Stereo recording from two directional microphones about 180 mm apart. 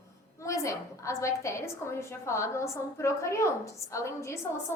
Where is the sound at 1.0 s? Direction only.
15° left (ahead or behind).